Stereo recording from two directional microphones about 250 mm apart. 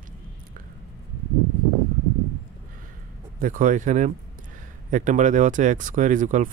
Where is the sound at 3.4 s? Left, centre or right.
Right.